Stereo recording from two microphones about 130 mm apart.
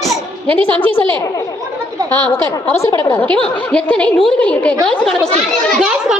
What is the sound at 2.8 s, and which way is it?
Speech, 25° left (ahead or behind).